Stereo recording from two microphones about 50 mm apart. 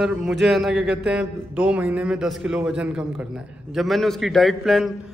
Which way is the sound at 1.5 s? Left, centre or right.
Right.